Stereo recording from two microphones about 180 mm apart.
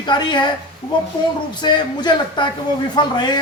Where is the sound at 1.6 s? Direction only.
25° left (ahead or behind).